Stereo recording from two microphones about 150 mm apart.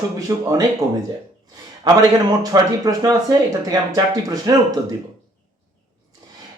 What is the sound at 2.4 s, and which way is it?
Speech, 25° right (ahead or behind).